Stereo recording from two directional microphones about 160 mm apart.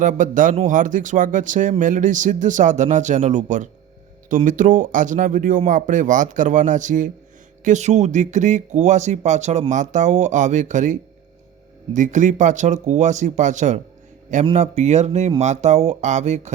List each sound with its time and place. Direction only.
0.0 s speech: 55° right (ahead or behind)
11.9 s speech: 50° right (ahead or behind)